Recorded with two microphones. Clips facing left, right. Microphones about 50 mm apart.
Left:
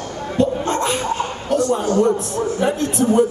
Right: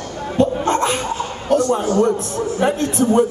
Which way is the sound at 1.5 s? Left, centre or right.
Right.